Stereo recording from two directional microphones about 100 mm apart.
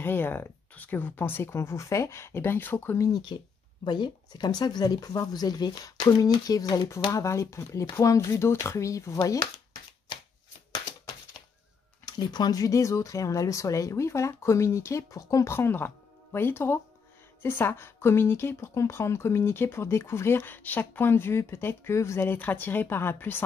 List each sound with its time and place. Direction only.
0.0 s a woman's voice: 20° left (ahead or behind)
3.1 s speech: 50° left (ahead or behind)
7.1 s a woman's voice: 30° left (ahead or behind)
12.1 s a woman's voice: 45° left (ahead or behind); by 23.4 s 20° left (ahead or behind)